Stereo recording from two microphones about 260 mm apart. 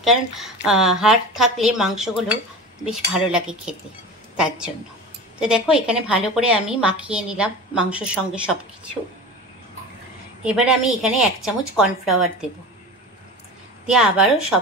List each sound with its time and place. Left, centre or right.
0.0 s a woman's voice: centre
5.4 s a woman's voice: centre
10.4 s a woman's voice: centre
13.8 s a woman's voice: centre